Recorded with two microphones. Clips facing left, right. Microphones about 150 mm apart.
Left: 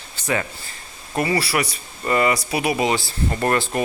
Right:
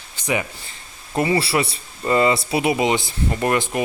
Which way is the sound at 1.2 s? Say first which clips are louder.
Right 2 dB; 25° right (ahead or behind).